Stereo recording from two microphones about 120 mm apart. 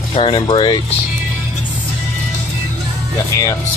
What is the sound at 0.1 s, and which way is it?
Speech, 45° left (ahead or behind).